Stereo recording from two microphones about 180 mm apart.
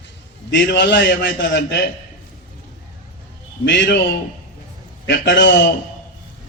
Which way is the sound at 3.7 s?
65° left (ahead or behind).